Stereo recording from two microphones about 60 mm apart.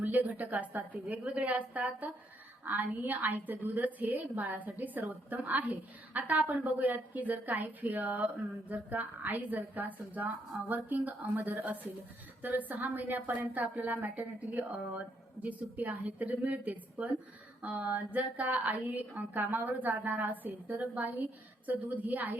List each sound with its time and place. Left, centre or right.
0.0 s a woman's voice: right